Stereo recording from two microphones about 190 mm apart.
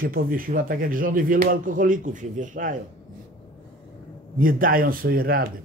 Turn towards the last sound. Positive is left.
turn(degrees=-50)  # may be behind; listen again after turning